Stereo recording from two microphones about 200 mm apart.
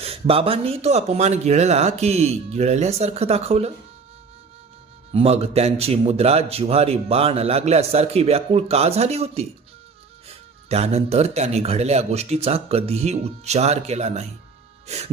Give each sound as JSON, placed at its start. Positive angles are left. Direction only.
{"t": 0.0, "sound": "a man's voice", "side_deg": -30}
{"t": 5.1, "sound": "a man's voice", "side_deg": -30}
{"t": 14.8, "sound": "music", "side_deg": -35}